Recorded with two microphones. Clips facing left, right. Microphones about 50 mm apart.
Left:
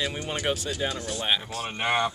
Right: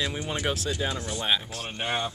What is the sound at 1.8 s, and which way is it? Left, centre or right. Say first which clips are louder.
Speech: left 4 dB; left.